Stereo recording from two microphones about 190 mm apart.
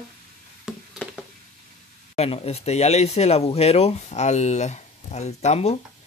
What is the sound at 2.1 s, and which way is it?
Speech, 35° left (ahead or behind).